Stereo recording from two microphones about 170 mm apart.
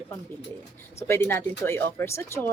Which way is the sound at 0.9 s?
15° left (ahead or behind).